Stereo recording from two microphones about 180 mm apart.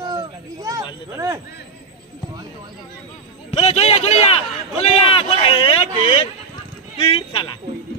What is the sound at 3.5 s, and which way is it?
A man's voice, 35° left (ahead or behind).